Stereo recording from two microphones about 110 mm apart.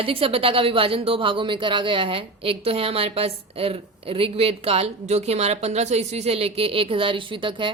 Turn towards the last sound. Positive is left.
turn(degrees=-50)  # may be behind; listen again after turning